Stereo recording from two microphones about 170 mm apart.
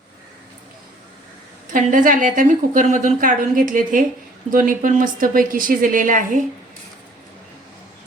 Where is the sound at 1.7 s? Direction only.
50° right (ahead or behind).